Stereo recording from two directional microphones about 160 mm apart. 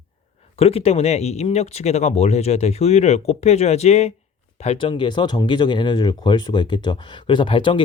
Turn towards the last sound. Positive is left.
turn(degrees=30)  # may be behind; listen again after turning